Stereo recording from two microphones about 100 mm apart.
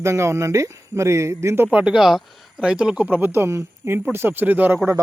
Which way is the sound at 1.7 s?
10° right (ahead or behind).